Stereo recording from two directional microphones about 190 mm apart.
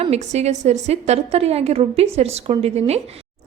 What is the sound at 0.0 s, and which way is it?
A woman's voice, 35° right (ahead or behind).